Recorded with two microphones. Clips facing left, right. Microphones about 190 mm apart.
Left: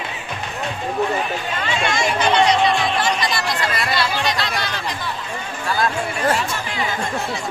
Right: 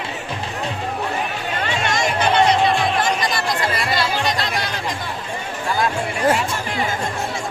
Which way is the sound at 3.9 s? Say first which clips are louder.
Even; 45° right (ahead or behind).